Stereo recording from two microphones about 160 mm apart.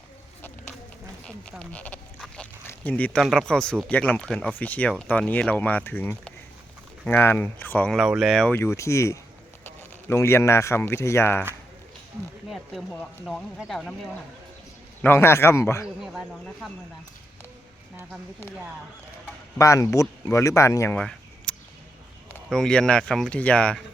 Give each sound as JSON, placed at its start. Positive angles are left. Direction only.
{"t": 1.5, "sound": "speech", "side_deg": 5}
{"t": 8.5, "sound": "speech", "side_deg": 15}
{"t": 12.5, "sound": "speech", "side_deg": 0}
{"t": 15.0, "sound": "speech", "side_deg": 15}
{"t": 18.1, "sound": "speech", "side_deg": 10}
{"t": 19.5, "sound": "speech", "side_deg": 20}
{"t": 20.9, "sound": "a sound", "side_deg": 5}
{"t": 22.4, "sound": "speech", "side_deg": 5}